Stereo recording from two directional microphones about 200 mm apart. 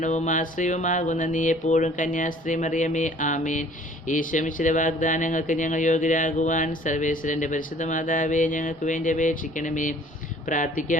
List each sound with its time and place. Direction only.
0.0 s music: 40° left (ahead or behind)